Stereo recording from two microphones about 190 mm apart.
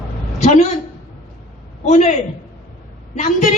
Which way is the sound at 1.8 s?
40° left (ahead or behind).